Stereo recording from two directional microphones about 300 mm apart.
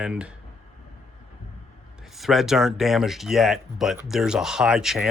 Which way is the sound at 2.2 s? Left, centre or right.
Centre.